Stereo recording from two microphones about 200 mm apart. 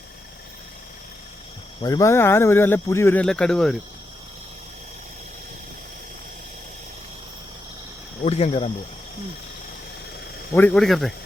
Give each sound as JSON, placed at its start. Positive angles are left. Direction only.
{"t": 1.8, "sound": "speech", "side_deg": 15}
{"t": 8.2, "sound": "speech", "side_deg": 30}
{"t": 10.5, "sound": "speech", "side_deg": 10}